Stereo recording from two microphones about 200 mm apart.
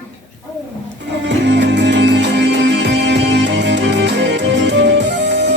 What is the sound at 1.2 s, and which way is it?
Music, 60° right (ahead or behind).